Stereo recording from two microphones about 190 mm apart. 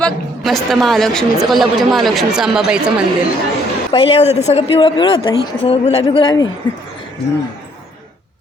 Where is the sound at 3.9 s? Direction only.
30° left (ahead or behind).